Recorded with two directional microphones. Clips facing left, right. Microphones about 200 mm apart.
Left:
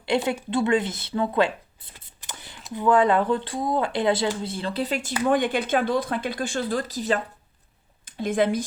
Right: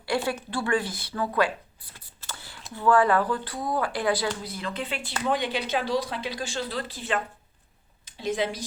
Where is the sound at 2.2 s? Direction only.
20° left (ahead or behind).